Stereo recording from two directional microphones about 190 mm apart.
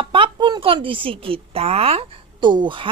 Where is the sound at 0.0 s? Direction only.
25° right (ahead or behind).